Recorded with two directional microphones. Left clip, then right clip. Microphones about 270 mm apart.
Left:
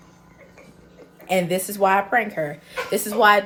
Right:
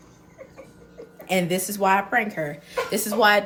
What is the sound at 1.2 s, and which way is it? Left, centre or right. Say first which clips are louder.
A woman's voice: left 2 dB; centre.